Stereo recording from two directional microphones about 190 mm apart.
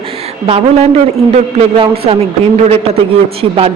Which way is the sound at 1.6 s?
30° right (ahead or behind).